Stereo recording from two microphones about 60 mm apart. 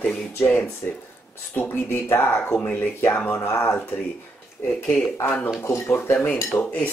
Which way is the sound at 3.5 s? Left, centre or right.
Left.